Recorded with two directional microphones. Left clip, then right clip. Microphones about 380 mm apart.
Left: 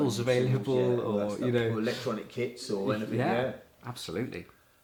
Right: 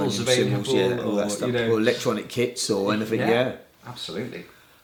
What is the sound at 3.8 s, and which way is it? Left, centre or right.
Speech, left.